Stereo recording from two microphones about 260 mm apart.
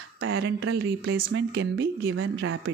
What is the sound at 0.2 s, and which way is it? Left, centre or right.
Speech, right.